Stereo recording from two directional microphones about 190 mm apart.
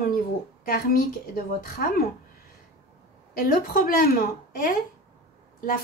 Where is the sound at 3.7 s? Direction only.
50° left (ahead or behind).